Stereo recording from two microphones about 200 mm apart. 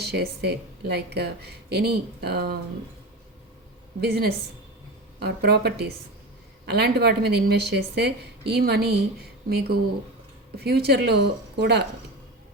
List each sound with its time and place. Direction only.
0.0 s speech: 55° right (ahead or behind)
4.0 s speech: 50° right (ahead or behind)